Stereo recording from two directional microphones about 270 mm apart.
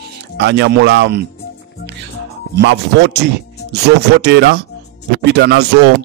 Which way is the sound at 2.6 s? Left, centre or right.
Right.